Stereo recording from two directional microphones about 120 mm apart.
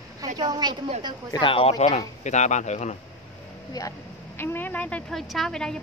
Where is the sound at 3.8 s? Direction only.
30° left (ahead or behind).